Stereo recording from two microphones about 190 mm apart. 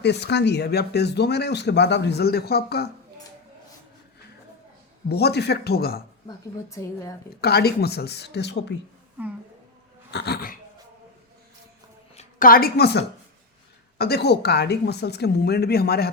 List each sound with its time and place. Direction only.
0.0 s speech: 65° left (ahead or behind)
5.0 s speech: 60° left (ahead or behind)
6.2 s a woman's voice: 15° left (ahead or behind)
7.4 s speech: 55° left (ahead or behind)
9.2 s a woman's voice: 10° right (ahead or behind)
10.1 s speech: 60° left (ahead or behind)
12.1 s a woman's voice: 45° left (ahead or behind)